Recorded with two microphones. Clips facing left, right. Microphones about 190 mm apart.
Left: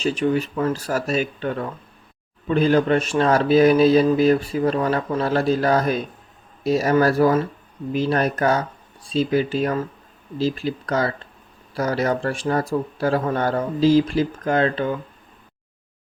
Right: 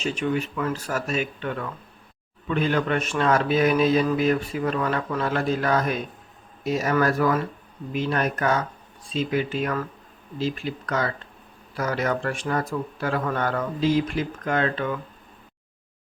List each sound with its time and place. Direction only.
0.0 s speech: 35° left (ahead or behind)